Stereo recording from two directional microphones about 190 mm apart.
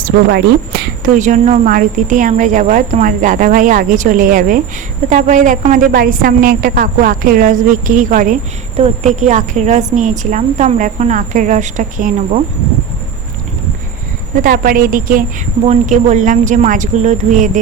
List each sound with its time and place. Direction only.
0.0 s a woman's voice: 55° right (ahead or behind)
14.4 s a woman's voice: 50° right (ahead or behind)